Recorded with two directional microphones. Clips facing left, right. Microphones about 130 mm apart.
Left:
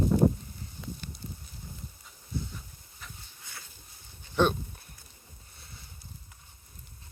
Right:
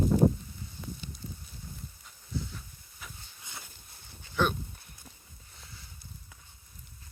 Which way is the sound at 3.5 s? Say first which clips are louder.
Right 2 dB; 15° right (ahead or behind).